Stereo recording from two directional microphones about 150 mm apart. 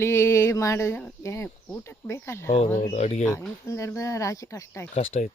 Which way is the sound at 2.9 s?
50° left (ahead or behind).